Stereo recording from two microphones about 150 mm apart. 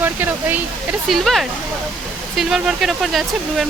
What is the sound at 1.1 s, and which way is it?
Speech, centre (ahead or behind).